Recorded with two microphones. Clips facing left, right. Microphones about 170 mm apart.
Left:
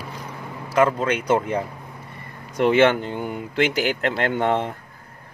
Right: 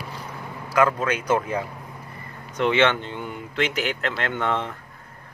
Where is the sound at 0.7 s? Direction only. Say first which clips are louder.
Left 2 dB; 25° left (ahead or behind).